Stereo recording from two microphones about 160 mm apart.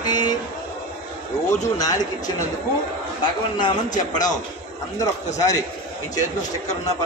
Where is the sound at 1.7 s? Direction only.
25° left (ahead or behind).